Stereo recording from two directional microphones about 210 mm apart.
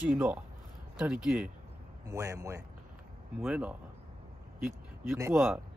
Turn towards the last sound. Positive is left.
turn(degrees=-5)  # may be behind; listen again after turning